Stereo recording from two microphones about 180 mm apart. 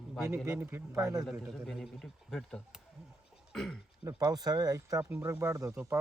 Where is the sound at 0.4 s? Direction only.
10° right (ahead or behind).